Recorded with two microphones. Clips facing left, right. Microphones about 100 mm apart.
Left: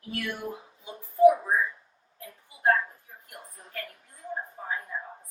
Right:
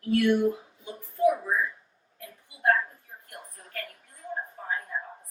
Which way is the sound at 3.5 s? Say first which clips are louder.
Even; 25° left (ahead or behind).